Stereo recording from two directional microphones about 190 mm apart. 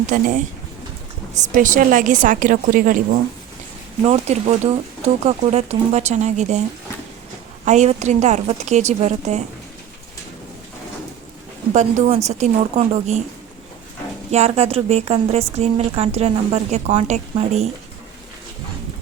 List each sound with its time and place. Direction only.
0.1 s a woman's voice: 45° right (ahead or behind)
4.0 s speech: 35° right (ahead or behind)
7.6 s speech: 40° right (ahead or behind)
11.7 s speech: 40° right (ahead or behind)
14.3 s speech: 35° right (ahead or behind)